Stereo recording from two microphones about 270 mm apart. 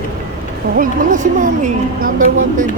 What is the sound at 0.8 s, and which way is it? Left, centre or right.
A woman's voice, right.